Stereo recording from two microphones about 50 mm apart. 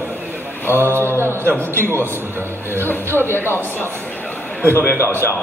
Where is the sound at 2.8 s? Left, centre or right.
Left.